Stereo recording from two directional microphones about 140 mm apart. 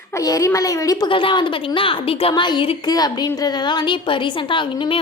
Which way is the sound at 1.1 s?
35° left (ahead or behind).